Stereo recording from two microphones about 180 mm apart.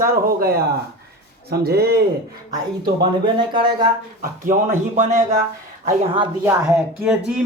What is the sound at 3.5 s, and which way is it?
Speech, 25° right (ahead or behind).